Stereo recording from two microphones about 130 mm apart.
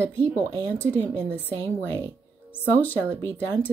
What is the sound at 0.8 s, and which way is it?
A woman's voice, 15° left (ahead or behind).